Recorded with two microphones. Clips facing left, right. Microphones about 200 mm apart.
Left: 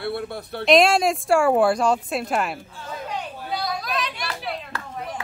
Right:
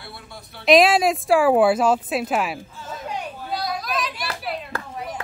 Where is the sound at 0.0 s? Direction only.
60° left (ahead or behind).